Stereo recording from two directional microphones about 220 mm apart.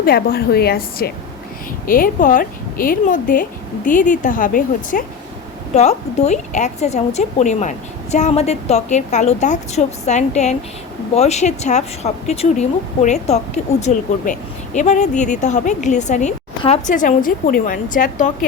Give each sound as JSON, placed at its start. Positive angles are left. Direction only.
{"t": 0.0, "sound": "a woman's voice", "side_deg": 45}